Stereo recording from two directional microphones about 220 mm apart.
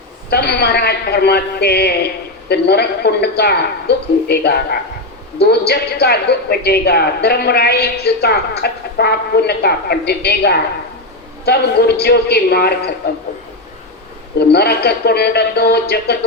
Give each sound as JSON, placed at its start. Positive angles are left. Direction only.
{"t": 0.3, "sound": "a woman's voice", "side_deg": 50}
{"t": 14.3, "sound": "a woman's voice", "side_deg": 45}